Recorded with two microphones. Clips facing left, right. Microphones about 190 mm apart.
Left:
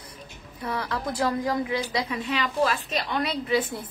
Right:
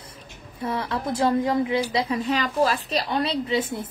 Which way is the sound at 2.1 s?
40° right (ahead or behind).